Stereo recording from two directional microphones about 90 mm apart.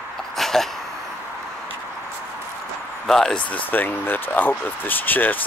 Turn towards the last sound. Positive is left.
turn(degrees=20)  # may be behind; listen again after turning